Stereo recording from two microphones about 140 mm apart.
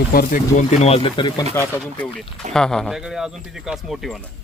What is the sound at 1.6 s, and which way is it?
Speech, 20° left (ahead or behind).